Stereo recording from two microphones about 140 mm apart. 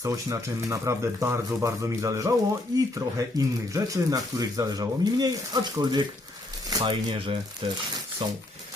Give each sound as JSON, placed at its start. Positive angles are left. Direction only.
{"t": 0.0, "sound": "speech", "side_deg": -20}